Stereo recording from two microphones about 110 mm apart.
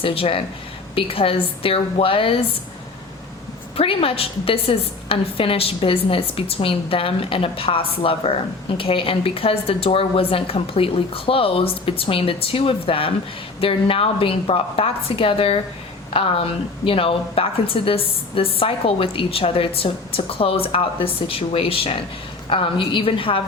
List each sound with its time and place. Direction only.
0.0 s a woman's voice: 55° left (ahead or behind)
3.8 s a woman's voice: 60° left (ahead or behind)